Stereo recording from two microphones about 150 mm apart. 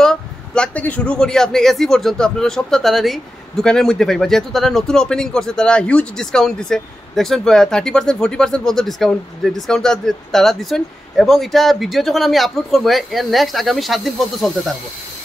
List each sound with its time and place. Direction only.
0.0 s a man's voice: 5° left (ahead or behind)